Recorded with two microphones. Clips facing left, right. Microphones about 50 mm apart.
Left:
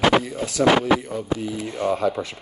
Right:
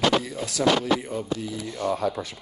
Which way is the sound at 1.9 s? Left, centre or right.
Left.